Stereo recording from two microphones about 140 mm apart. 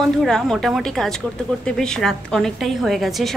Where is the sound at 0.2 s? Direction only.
5° left (ahead or behind).